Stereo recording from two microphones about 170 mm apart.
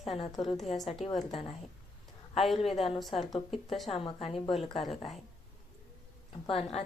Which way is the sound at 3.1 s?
35° left (ahead or behind).